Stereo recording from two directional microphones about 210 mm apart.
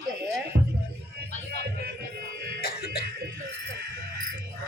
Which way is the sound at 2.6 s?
50° left (ahead or behind).